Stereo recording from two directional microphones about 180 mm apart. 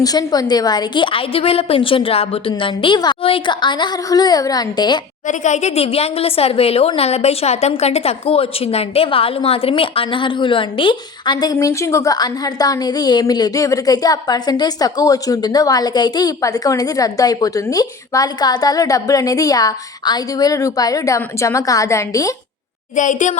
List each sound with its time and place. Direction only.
0.0 s a woman's voice: 20° left (ahead or behind)
5.3 s a woman's voice: 40° left (ahead or behind); by 22.4 s 20° left (ahead or behind)
23.0 s a woman's voice: 45° left (ahead or behind)